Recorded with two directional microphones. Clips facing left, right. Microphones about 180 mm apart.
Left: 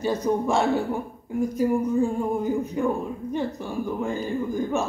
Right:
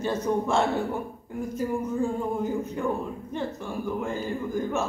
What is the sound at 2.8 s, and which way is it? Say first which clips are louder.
Speech: left 4 dB; 15° left (ahead or behind).